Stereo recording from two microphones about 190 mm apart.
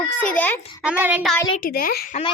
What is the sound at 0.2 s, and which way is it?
Speech, 10° left (ahead or behind).